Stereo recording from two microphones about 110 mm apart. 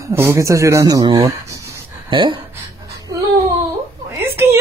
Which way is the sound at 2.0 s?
50° right (ahead or behind).